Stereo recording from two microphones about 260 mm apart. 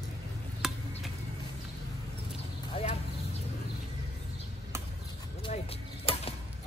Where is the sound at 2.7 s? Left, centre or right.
Left.